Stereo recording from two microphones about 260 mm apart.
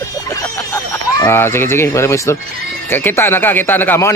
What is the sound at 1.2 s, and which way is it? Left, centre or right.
A man's voice, centre.